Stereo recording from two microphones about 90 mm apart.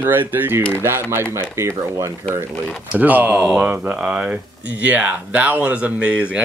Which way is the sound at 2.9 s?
20° right (ahead or behind).